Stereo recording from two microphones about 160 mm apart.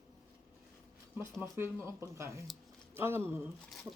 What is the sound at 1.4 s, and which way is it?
Speech, 15° right (ahead or behind).